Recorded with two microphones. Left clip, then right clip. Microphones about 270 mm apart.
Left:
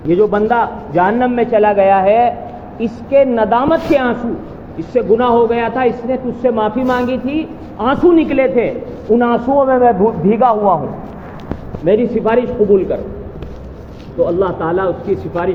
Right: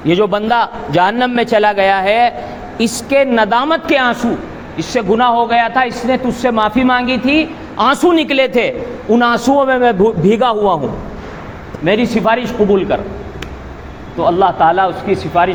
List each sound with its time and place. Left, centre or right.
0.1 s a man's voice: right
11.9 s a man's voice: right
14.3 s a man's voice: right